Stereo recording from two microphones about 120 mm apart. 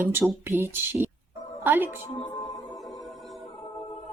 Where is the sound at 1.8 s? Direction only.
40° left (ahead or behind).